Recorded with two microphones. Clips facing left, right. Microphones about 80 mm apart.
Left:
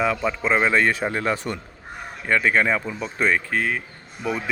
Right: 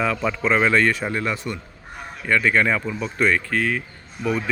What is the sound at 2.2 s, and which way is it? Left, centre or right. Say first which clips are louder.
Speech: right 1 dB; left.